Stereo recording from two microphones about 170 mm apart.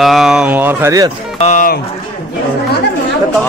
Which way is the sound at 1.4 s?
45° left (ahead or behind).